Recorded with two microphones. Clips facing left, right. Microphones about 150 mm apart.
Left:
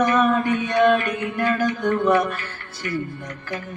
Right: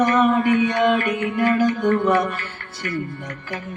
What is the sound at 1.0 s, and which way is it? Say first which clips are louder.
Mantra: right 3 dB; 20° right (ahead or behind).